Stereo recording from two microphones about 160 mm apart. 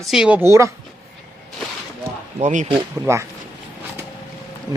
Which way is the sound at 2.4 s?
50° right (ahead or behind).